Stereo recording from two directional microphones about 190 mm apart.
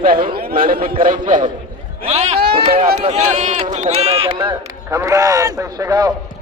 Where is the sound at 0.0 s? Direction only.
50° right (ahead or behind).